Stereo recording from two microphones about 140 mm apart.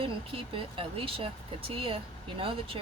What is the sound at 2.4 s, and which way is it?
Speech, 40° right (ahead or behind).